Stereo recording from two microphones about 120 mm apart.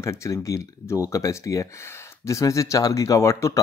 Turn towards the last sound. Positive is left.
turn(degrees=25)  # may be behind; listen again after turning